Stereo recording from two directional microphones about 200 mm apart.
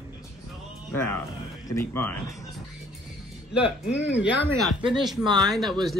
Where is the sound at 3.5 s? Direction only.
5° right (ahead or behind).